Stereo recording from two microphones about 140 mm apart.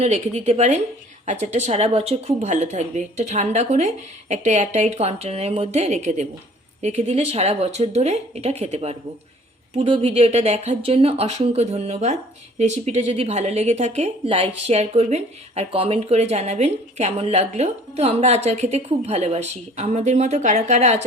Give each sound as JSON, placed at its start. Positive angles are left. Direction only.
{"t": 0.0, "sound": "speech", "side_deg": -50}